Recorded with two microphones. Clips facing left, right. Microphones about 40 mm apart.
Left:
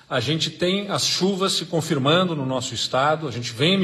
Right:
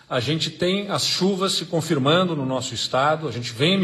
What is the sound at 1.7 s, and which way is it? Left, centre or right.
Speech, left.